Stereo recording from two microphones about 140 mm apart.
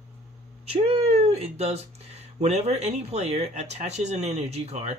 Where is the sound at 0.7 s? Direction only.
50° right (ahead or behind).